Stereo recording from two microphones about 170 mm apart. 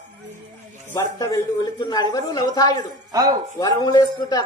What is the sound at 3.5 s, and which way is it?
Speech, 20° left (ahead or behind).